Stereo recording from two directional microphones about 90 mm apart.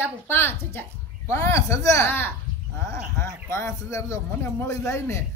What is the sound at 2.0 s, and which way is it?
A man's voice, 20° left (ahead or behind).